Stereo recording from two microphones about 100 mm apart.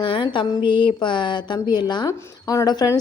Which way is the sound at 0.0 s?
55° left (ahead or behind).